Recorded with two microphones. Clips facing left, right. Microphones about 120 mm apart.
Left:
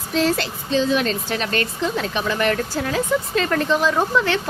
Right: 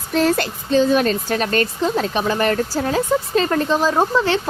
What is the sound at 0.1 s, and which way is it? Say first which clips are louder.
A woman's voice: right 3 dB; 50° right (ahead or behind).